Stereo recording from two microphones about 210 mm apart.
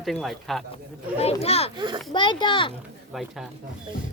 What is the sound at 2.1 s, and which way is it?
Speech, 20° left (ahead or behind).